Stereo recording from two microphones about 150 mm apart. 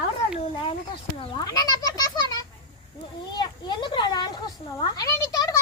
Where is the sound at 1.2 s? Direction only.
30° left (ahead or behind).